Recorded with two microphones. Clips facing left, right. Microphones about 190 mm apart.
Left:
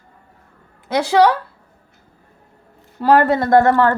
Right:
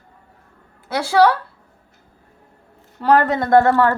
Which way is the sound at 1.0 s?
15° left (ahead or behind).